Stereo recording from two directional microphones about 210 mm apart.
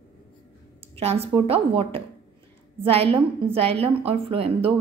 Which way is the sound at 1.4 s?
25° right (ahead or behind).